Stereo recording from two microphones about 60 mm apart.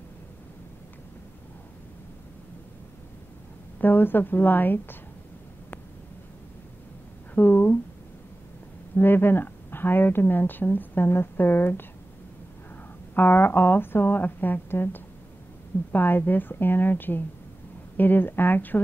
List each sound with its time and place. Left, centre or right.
3.8 s a woman's voice: left
7.3 s a sound: left
8.9 s a woman's voice: left
13.1 s a woman's voice: left